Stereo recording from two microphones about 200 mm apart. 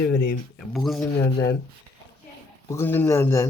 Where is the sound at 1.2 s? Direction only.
15° left (ahead or behind).